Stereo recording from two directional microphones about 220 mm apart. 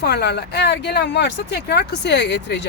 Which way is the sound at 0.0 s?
50° left (ahead or behind).